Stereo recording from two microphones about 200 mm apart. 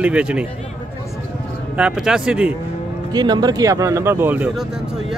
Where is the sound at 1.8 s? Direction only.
5° right (ahead or behind).